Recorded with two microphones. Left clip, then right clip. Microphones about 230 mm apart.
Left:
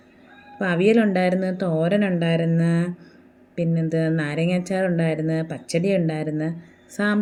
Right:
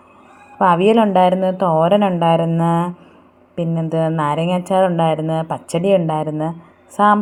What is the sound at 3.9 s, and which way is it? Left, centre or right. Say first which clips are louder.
Speech: right 7 dB; right.